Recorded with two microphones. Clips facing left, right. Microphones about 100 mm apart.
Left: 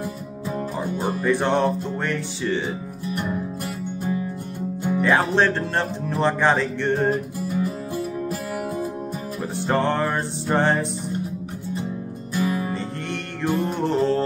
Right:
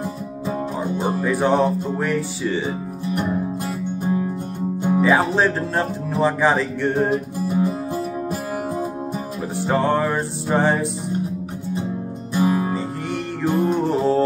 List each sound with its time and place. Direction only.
0.5 s music: 25° right (ahead or behind)
1.2 s speech: 5° right (ahead or behind)
3.2 s music: 20° right (ahead or behind)
5.0 s speech: 5° right (ahead or behind)
7.4 s music: 25° right (ahead or behind)
9.6 s speech: 5° right (ahead or behind)
12.4 s music: 30° right (ahead or behind)
12.7 s music: 5° right (ahead or behind)